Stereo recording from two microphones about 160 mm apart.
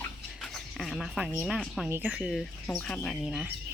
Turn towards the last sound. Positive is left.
turn(degrees=-5)  # may be behind; listen again after turning